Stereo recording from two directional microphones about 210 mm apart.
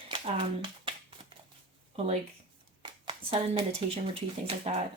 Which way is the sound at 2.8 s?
25° right (ahead or behind).